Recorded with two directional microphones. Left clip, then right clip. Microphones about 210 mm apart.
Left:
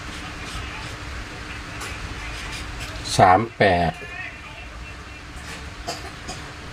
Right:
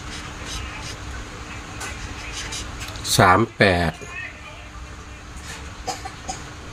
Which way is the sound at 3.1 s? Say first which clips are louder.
Even; 30° right (ahead or behind).